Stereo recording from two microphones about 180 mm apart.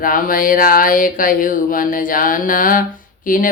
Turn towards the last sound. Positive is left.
turn(degrees=50)  # may be behind; listen again after turning